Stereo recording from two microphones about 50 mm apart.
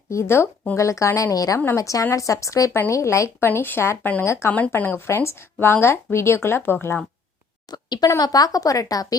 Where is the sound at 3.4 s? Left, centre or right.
Left.